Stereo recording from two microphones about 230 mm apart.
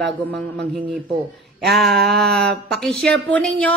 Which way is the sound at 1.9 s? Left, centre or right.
Right.